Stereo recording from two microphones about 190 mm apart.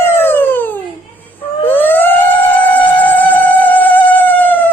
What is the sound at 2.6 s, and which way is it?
Music, 10° left (ahead or behind).